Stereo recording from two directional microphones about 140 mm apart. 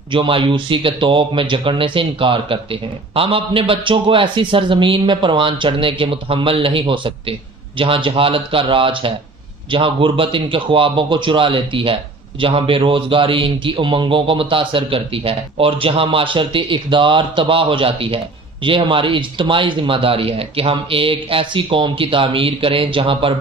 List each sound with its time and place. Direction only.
0.1 s a man's voice: 35° right (ahead or behind)